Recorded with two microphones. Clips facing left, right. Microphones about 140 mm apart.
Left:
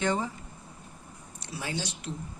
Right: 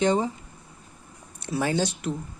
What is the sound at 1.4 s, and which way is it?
Speech, 55° right (ahead or behind).